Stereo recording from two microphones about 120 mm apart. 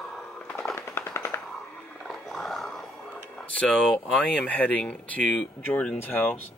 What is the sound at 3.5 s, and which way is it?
Speech, 10° left (ahead or behind).